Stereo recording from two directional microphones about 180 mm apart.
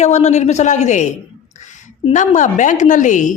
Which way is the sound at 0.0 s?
40° left (ahead or behind).